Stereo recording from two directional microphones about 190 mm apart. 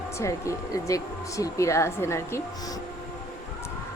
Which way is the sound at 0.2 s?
15° left (ahead or behind).